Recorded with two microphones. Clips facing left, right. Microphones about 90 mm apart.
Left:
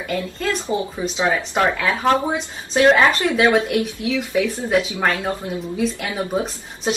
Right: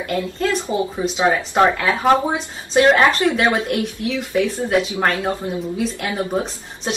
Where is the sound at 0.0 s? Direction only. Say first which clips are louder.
Right 3 dB; centre (ahead or behind).